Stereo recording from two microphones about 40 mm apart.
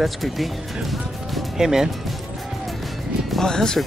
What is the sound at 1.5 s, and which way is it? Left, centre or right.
Speech, centre.